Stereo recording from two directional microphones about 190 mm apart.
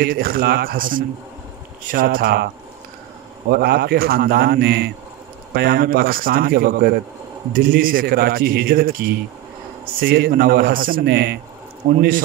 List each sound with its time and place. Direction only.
0.0 s a man's voice: 50° right (ahead or behind)
9.9 s a man's voice: 50° right (ahead or behind)
11.8 s a man's voice: 40° right (ahead or behind)